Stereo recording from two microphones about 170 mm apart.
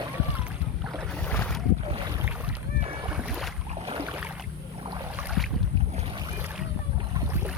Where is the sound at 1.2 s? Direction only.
10° left (ahead or behind).